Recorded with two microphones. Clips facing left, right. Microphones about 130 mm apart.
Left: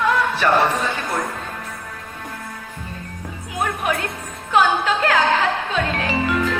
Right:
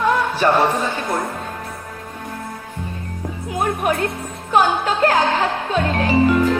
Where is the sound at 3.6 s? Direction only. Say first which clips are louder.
Right 3 dB; 40° right (ahead or behind).